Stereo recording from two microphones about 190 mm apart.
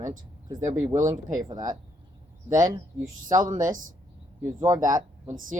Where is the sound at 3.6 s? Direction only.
45° right (ahead or behind).